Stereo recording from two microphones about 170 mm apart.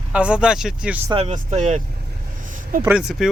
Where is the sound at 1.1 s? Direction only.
40° right (ahead or behind).